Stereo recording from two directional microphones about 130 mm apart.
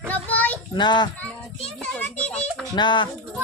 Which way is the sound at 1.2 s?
10° left (ahead or behind).